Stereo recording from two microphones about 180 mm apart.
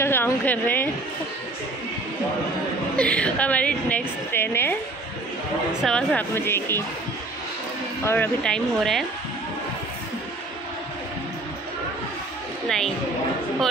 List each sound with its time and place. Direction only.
0.0 s a sound: 10° left (ahead or behind)
3.0 s a woman's voice: 5° left (ahead or behind)
5.8 s a woman's voice: 5° left (ahead or behind)
8.0 s speech: 10° left (ahead or behind)
12.6 s speech: centre (ahead or behind)